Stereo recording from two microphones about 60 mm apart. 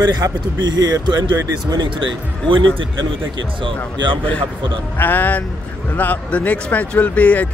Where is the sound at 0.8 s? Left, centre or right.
Right.